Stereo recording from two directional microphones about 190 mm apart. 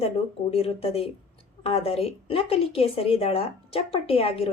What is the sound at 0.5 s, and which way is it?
A woman's voice, 30° left (ahead or behind).